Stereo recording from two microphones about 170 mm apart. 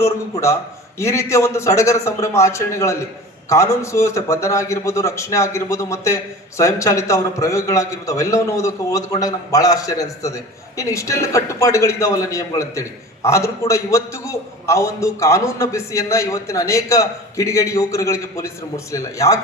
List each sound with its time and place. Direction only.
0.0 s a man's voice: 15° left (ahead or behind)